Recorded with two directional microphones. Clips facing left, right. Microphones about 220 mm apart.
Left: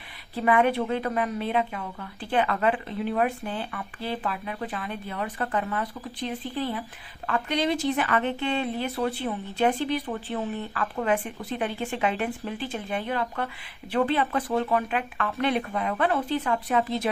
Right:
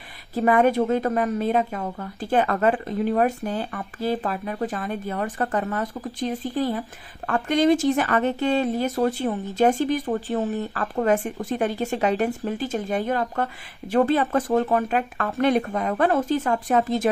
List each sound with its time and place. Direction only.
0.3 s a woman's voice: 40° right (ahead or behind)